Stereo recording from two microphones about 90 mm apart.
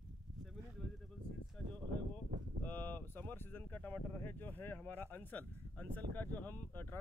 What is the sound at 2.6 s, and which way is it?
Speech, 20° left (ahead or behind).